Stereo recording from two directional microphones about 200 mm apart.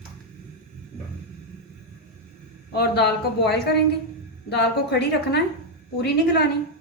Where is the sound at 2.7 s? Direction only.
55° left (ahead or behind).